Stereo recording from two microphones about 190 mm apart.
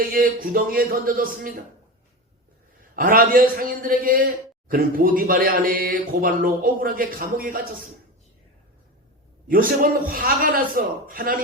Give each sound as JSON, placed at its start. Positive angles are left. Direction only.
{"t": 0.0, "sound": "speech", "side_deg": -50}
{"t": 2.9, "sound": "speech", "side_deg": -50}
{"t": 9.5, "sound": "speech", "side_deg": -50}